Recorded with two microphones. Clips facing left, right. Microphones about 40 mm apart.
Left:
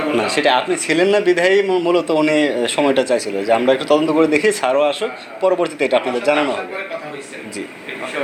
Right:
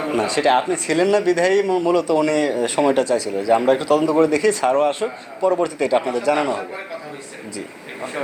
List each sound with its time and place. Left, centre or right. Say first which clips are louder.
0.0 s speech: left 3 dB; left